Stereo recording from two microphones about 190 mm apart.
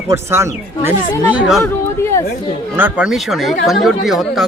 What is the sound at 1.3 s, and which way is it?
Speech, centre (ahead or behind).